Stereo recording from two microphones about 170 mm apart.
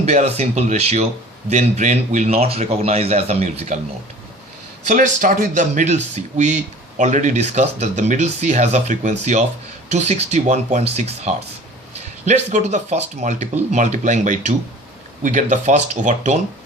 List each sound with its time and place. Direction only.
0.0 s speech: 40° right (ahead or behind)
4.9 s speech: 45° right (ahead or behind)